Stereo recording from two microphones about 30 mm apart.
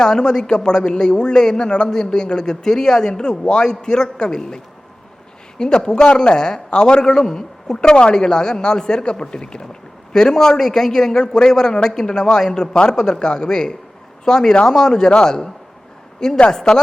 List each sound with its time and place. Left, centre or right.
0.0 s a man's voice: left
12.5 s speech: left
16.5 s speech: left